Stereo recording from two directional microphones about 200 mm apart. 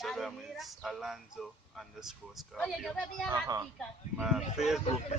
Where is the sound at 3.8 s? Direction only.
Centre (ahead or behind).